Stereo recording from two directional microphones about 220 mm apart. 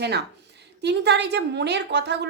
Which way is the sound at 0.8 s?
50° right (ahead or behind).